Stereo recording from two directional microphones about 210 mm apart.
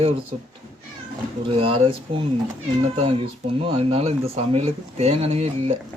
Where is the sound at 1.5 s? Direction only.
25° right (ahead or behind).